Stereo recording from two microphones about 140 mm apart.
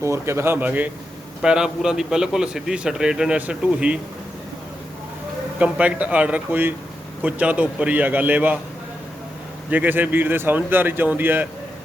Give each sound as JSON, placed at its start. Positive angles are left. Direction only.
{"t": 0.0, "sound": "a man's voice", "side_deg": -20}
{"t": 5.5, "sound": "speech", "side_deg": -10}
{"t": 9.6, "sound": "speech", "side_deg": -10}